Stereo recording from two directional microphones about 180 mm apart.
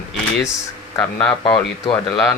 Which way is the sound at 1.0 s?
5° left (ahead or behind).